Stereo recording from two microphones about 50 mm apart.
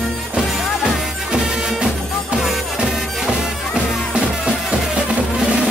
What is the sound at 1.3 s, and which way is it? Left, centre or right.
Music, centre.